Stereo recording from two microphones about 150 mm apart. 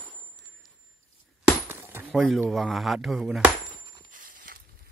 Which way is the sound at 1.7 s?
15° right (ahead or behind).